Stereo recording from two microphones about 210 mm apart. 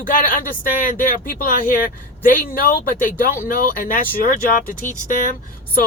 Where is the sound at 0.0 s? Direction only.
40° left (ahead or behind).